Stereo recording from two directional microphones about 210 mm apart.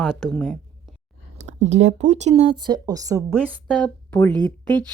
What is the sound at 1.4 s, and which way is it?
Speech, 35° right (ahead or behind).